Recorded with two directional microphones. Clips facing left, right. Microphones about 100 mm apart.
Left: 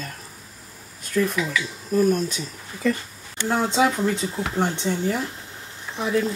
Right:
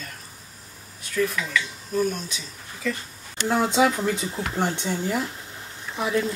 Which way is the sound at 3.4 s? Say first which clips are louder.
Even; 5° right (ahead or behind).